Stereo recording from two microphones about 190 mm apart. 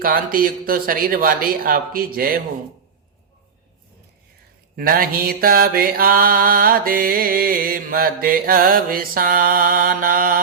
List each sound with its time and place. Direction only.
0.0 s mantra: 50° right (ahead or behind)
4.8 s mantra: 50° right (ahead or behind)